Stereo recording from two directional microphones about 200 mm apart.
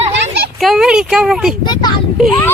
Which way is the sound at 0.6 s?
Centre (ahead or behind).